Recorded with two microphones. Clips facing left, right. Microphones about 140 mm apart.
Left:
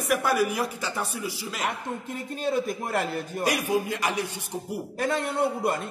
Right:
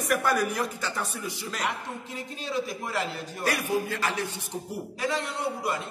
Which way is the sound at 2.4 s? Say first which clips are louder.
Left 5 dB; 50° left (ahead or behind).